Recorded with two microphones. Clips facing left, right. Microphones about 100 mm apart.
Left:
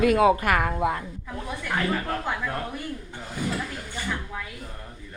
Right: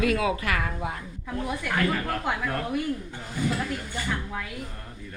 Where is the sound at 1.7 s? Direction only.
25° left (ahead or behind).